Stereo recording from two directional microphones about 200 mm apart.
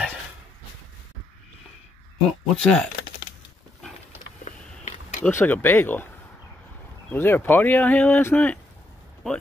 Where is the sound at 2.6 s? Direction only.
5° left (ahead or behind).